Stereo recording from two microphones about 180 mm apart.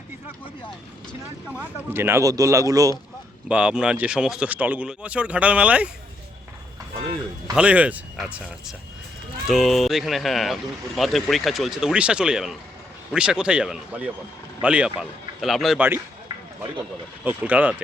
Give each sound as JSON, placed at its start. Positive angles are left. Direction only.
{"t": 1.5, "sound": "speech", "side_deg": -10}
{"t": 3.5, "sound": "speech", "side_deg": -5}
{"t": 7.5, "sound": "a man's voice", "side_deg": -5}
{"t": 17.2, "sound": "speech", "side_deg": -10}